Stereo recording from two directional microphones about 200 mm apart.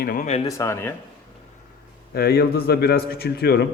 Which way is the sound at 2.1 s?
50° left (ahead or behind).